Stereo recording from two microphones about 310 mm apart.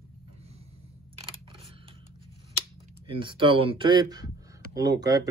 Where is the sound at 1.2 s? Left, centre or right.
Centre.